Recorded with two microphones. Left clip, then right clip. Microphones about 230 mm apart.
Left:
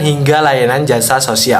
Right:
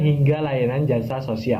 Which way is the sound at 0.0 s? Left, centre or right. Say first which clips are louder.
Left 12 dB; left.